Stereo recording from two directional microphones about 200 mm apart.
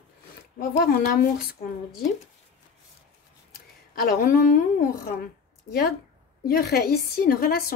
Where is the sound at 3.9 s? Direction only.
45° left (ahead or behind).